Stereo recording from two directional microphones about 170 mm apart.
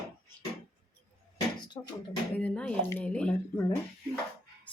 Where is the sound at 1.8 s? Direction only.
20° left (ahead or behind).